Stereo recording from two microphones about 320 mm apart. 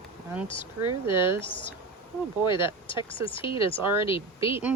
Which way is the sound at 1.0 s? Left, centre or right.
Centre.